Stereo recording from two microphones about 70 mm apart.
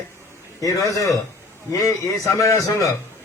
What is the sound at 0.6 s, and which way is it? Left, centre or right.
A man's voice, left.